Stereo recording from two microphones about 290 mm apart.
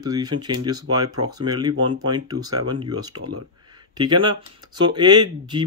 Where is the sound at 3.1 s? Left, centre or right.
Right.